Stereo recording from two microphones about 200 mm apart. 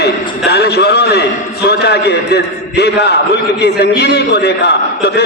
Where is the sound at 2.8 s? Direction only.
55° left (ahead or behind).